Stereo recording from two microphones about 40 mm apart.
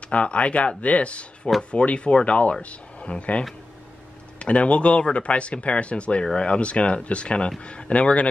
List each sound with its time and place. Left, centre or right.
0.1 s speech: left